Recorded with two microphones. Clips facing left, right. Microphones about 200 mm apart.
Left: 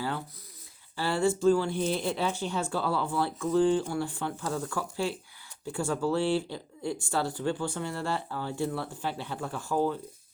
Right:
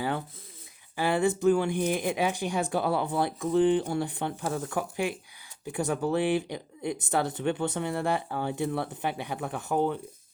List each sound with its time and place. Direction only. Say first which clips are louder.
0.9 s speech: right 2 dB; 15° right (ahead or behind)